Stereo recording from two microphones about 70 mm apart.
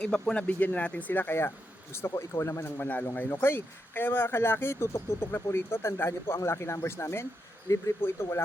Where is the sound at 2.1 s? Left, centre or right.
Left.